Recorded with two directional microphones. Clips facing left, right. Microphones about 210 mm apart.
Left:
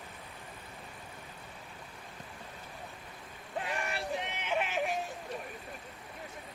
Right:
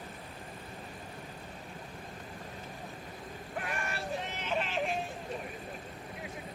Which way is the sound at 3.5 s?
20° left (ahead or behind).